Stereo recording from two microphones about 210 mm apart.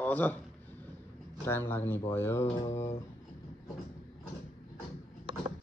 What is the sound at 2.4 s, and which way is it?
Speech, 25° left (ahead or behind).